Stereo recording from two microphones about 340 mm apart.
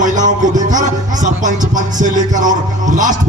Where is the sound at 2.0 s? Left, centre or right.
Right.